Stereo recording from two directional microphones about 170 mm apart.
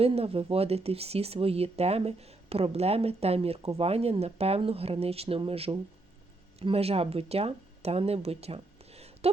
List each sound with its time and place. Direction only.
0.0 s speech: 35° right (ahead or behind)